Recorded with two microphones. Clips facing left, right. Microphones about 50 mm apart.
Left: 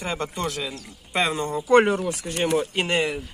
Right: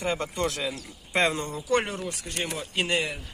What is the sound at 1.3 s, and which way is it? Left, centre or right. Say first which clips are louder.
Speech: left 7 dB; left.